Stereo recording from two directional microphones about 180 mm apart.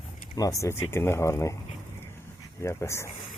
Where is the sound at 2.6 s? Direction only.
15° left (ahead or behind).